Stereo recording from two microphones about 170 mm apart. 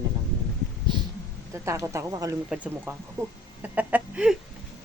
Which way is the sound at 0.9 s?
25° right (ahead or behind).